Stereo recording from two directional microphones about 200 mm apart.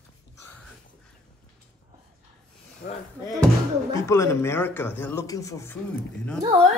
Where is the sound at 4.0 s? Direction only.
15° left (ahead or behind).